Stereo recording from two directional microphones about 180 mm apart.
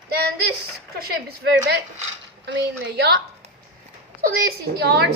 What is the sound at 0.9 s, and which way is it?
A woman's voice, 60° right (ahead or behind).